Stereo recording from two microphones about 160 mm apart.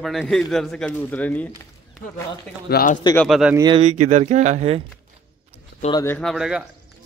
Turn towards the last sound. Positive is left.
turn(degrees=-5)  # may be behind; listen again after turning